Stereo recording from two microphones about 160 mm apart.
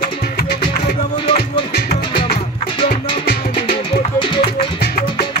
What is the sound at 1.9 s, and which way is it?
Music, 85° left.